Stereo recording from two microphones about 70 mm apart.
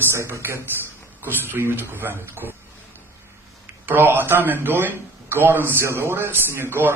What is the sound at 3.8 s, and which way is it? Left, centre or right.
A man's voice, right.